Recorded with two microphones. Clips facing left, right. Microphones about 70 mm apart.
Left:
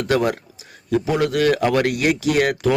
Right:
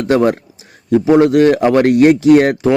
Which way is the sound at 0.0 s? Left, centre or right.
Right.